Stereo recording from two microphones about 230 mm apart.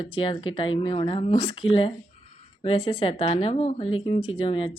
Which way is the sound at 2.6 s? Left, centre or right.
Left.